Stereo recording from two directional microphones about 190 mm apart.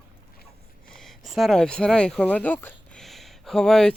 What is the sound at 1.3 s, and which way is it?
Speech, centre (ahead or behind).